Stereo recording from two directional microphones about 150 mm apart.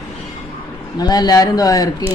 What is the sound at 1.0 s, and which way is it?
Speech, 25° left (ahead or behind).